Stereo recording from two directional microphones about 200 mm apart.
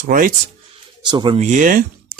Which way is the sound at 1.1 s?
25° right (ahead or behind).